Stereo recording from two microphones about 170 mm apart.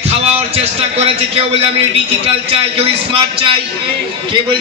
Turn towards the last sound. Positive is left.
turn(degrees=-30)  # may be behind; listen again after turning